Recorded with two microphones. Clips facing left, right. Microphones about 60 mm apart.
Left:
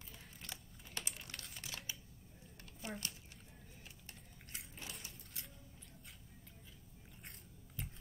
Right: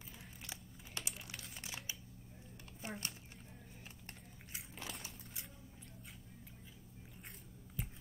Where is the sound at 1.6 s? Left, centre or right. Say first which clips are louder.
Right 1 dB; centre.